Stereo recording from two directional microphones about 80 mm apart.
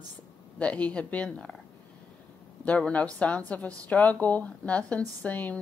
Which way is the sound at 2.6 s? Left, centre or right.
Centre.